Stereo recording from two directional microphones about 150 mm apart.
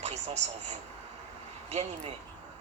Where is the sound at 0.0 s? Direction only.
50° right (ahead or behind).